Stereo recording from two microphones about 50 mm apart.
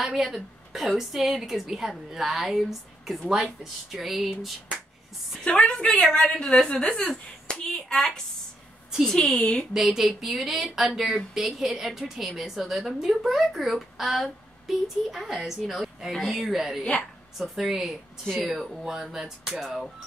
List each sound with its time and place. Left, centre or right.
0.0 s a woman's voice: centre
5.7 s a woman's voice: left
9.8 s a woman's voice: centre